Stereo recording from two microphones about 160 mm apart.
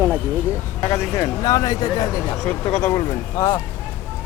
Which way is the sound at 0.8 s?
15° left (ahead or behind).